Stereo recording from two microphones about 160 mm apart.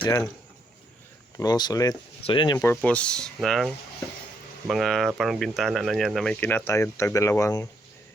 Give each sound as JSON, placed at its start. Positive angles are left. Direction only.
{"t": 0.0, "sound": "speech", "side_deg": 20}
{"t": 1.4, "sound": "speech", "side_deg": 25}
{"t": 2.6, "sound": "speech", "side_deg": 10}
{"t": 4.7, "sound": "speech", "side_deg": 0}
{"t": 6.4, "sound": "speech", "side_deg": 15}